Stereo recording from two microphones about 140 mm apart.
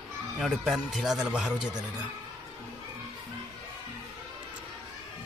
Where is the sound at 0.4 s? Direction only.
Centre (ahead or behind).